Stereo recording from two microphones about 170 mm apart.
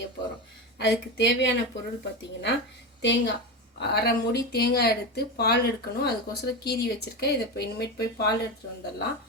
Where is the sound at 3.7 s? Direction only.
70° left (ahead or behind).